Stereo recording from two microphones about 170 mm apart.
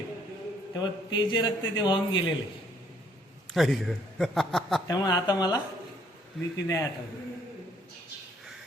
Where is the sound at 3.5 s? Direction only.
Centre (ahead or behind).